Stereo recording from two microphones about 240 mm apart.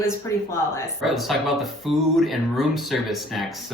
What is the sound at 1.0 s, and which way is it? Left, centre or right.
Speech, centre.